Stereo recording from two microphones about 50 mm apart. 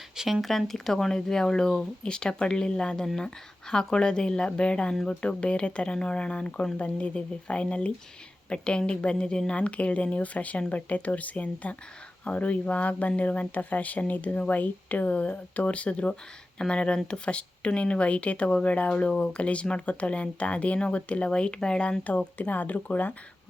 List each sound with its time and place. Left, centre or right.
0.4 s speech: centre
22.4 s speech: left